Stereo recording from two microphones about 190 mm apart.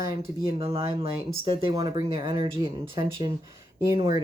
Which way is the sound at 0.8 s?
20° right (ahead or behind).